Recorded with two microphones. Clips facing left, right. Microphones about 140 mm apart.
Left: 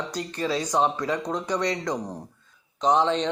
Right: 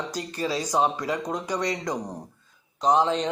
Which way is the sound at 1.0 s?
10° right (ahead or behind).